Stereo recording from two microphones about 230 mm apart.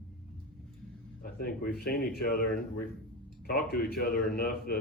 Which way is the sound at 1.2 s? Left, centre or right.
Left.